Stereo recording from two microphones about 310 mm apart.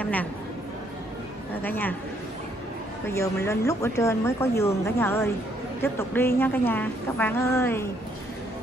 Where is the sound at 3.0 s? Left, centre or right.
Centre.